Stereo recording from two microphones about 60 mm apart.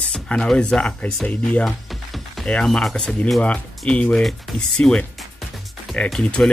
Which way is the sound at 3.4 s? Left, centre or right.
Left.